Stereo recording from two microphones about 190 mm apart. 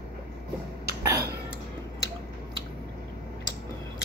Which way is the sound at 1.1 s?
55° right (ahead or behind).